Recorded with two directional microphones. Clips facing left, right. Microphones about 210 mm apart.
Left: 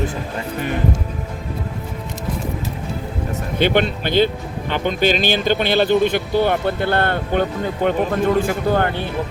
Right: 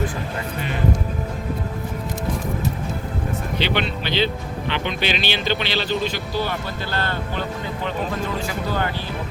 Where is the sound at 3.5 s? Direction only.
50° left (ahead or behind).